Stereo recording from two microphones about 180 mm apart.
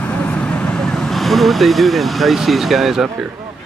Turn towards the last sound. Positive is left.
turn(degrees=0)  # may be behind; listen again after turning